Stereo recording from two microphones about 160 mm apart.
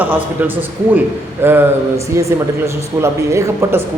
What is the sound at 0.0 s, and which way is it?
A man's voice, 10° right (ahead or behind).